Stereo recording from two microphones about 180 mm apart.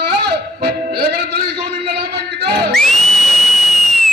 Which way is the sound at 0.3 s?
65° right (ahead or behind).